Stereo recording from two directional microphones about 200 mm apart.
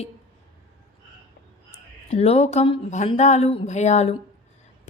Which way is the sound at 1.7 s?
30° left (ahead or behind).